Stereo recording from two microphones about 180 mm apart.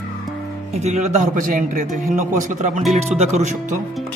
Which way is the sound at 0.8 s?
40° right (ahead or behind).